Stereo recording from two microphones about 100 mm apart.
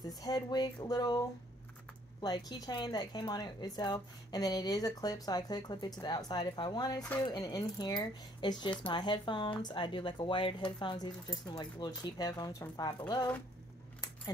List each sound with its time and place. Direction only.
0.2 s speech: 45° left (ahead or behind)
2.2 s speech: 45° left (ahead or behind)